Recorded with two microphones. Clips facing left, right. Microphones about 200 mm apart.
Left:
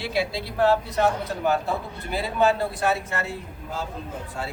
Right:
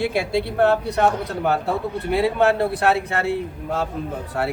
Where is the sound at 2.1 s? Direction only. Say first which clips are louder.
Right 4 dB; 65° right (ahead or behind).